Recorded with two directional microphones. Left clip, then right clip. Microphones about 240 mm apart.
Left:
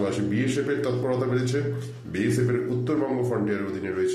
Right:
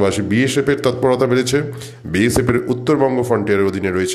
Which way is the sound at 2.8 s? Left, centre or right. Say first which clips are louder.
Right 10 dB; right.